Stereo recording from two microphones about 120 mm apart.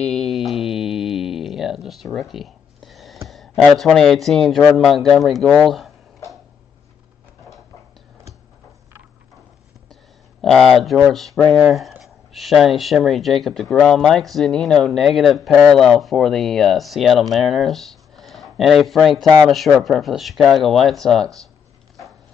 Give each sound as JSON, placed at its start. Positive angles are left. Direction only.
{"t": 0.0, "sound": "a sound", "side_deg": 5}
{"t": 3.7, "sound": "speech", "side_deg": 0}
{"t": 10.4, "sound": "speech", "side_deg": 5}
{"t": 19.2, "sound": "speech", "side_deg": -40}
{"t": 19.5, "sound": "speech", "side_deg": 0}